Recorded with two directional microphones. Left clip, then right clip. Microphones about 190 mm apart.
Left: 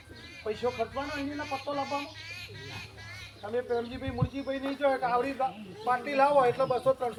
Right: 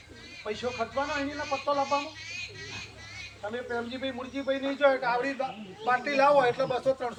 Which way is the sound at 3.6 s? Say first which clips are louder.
Even; 20° left (ahead or behind).